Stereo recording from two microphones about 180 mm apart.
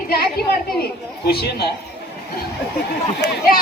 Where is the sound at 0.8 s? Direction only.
60° left (ahead or behind).